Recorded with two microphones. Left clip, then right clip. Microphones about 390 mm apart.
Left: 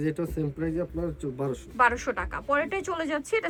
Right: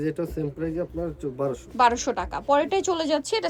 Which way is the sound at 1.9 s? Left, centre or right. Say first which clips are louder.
Right 3 dB; centre.